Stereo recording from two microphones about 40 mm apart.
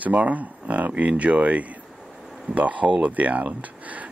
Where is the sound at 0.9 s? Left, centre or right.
Right.